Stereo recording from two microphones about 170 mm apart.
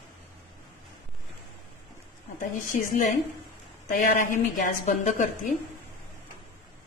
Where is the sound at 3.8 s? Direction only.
55° left (ahead or behind).